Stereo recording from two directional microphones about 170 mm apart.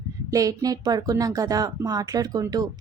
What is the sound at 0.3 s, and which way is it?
Speech, 20° right (ahead or behind).